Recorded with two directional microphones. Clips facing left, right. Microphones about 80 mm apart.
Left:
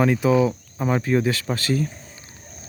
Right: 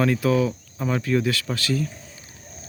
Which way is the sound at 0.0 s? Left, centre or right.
Centre.